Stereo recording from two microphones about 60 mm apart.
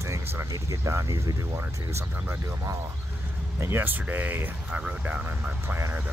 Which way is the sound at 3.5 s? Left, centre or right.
Right.